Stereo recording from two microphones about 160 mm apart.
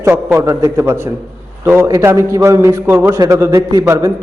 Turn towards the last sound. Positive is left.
turn(degrees=-20)  # may be behind; listen again after turning